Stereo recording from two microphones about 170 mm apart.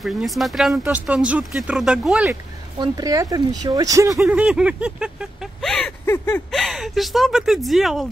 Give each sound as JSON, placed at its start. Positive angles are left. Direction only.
{"t": 0.0, "sound": "speech", "side_deg": 0}
{"t": 2.8, "sound": "speech", "side_deg": -20}
{"t": 6.0, "sound": "a sound", "side_deg": 15}
{"t": 6.5, "sound": "speech", "side_deg": 0}